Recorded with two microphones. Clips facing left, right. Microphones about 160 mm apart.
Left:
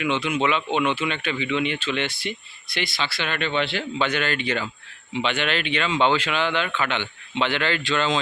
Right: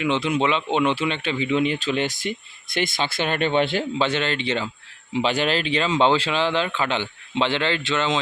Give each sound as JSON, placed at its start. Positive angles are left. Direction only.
{"t": 0.0, "sound": "speech", "side_deg": -30}
{"t": 4.0, "sound": "speech", "side_deg": -25}
{"t": 5.1, "sound": "speech", "side_deg": -35}